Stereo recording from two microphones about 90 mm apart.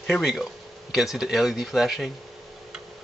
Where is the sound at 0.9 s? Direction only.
5° right (ahead or behind).